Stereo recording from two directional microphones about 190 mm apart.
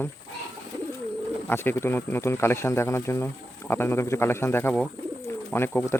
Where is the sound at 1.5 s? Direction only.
10° left (ahead or behind).